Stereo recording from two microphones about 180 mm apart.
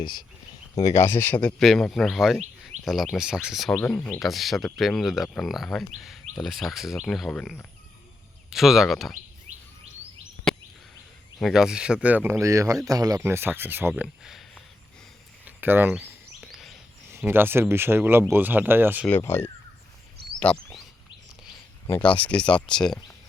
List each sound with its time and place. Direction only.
0.0 s speech: 25° left (ahead or behind); by 9.1 s centre (ahead or behind)
9.5 s insect: 40° right (ahead or behind)
10.5 s a sound: 5° left (ahead or behind)
11.3 s speech: centre (ahead or behind)
15.4 s a sound: 10° right (ahead or behind)
17.1 s speech: 15° right (ahead or behind)
19.0 s speech: 10° left (ahead or behind)
20.4 s a sound: 5° left (ahead or behind)
21.8 s speech: 15° left (ahead or behind)